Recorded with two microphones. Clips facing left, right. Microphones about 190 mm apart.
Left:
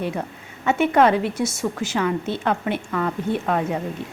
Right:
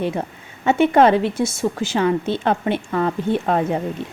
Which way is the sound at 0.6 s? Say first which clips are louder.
Right 3 dB; 30° right (ahead or behind).